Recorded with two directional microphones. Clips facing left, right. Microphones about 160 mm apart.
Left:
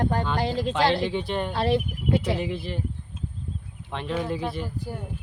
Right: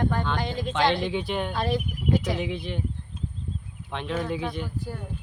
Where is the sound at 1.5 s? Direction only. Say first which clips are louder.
Left 3 dB; 30° left (ahead or behind).